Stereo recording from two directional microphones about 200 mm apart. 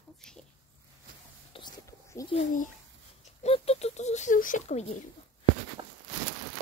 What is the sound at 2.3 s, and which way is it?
Speech, 40° left (ahead or behind).